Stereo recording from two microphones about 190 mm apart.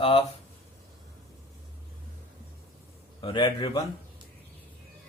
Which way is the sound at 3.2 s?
20° left (ahead or behind).